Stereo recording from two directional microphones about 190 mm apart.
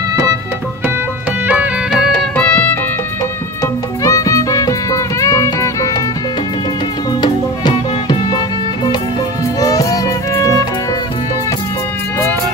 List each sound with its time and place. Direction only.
1.5 s music: 5° right (ahead or behind); by 6.0 s 15° left (ahead or behind)
7.1 s music: 25° left (ahead or behind)
9.6 s music: 20° left (ahead or behind)